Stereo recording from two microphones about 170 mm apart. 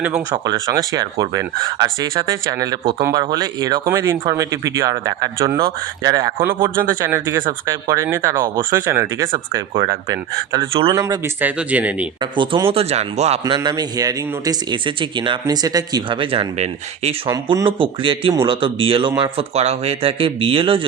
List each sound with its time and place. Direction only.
0.4 s speech: 20° right (ahead or behind)
5.5 s speech: 65° right (ahead or behind)
6.0 s speech: 20° right (ahead or behind)
11.3 s speech: 10° right (ahead or behind)
12.2 s speech: 25° right (ahead or behind)
13.4 s speech: 25° right (ahead or behind)
17.2 s speech: 25° right (ahead or behind)